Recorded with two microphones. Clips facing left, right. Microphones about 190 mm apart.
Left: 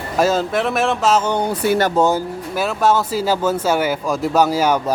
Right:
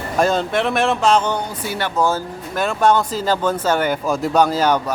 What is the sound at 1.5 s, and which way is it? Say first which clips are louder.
Speech: left 9 dB; 60° left (ahead or behind).